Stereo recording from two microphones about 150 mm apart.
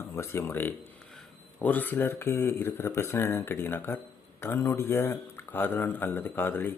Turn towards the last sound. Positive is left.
turn(degrees=15)  # may be behind; listen again after turning